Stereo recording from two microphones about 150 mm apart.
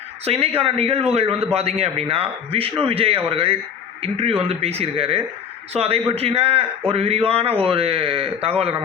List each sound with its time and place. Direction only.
0.3 s a man's voice: 40° right (ahead or behind)